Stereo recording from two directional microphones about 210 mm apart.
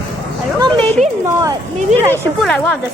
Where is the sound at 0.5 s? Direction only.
20° right (ahead or behind).